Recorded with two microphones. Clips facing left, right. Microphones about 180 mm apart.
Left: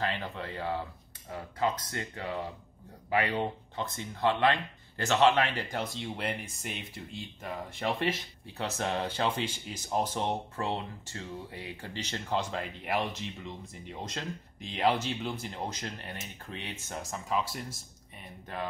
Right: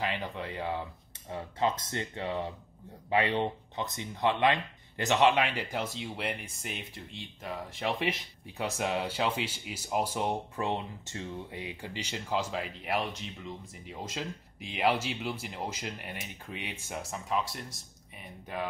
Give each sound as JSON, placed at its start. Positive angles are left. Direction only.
{"t": 0.0, "sound": "speech", "side_deg": -15}
{"t": 8.5, "sound": "speech", "side_deg": -10}